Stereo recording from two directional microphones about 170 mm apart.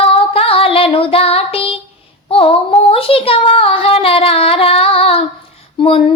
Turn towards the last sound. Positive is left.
turn(degrees=30)  # may be behind; listen again after turning